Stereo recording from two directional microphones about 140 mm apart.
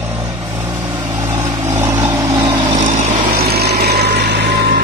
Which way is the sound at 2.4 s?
40° right (ahead or behind).